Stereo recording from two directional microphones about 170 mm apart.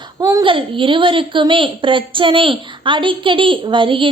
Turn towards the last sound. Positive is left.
turn(degrees=-30)  # may be behind; listen again after turning